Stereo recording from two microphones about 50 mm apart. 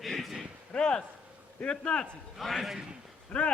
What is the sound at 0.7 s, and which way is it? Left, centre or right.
A man's voice, centre.